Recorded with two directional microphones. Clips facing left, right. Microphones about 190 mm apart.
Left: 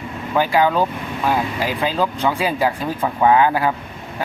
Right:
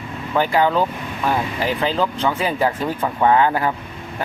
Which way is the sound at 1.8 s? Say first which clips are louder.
Left 2 dB; 10° left (ahead or behind).